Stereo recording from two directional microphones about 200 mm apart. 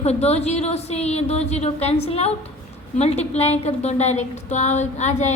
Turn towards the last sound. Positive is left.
turn(degrees=35)  # may be behind; listen again after turning